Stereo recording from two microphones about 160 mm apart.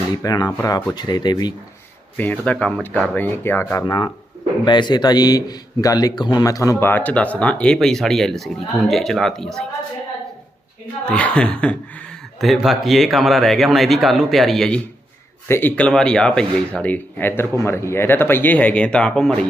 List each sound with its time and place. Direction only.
0.2 s speech: 25° left (ahead or behind)
2.1 s speech: 10° left (ahead or behind)
11.0 s speech: 5° left (ahead or behind)
15.4 s speech: 15° left (ahead or behind)